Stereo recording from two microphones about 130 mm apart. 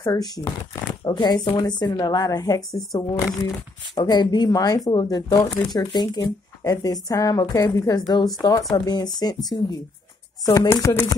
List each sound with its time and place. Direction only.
0.0 s a woman's voice: 30° left (ahead or behind)
10.4 s speech: 25° left (ahead or behind)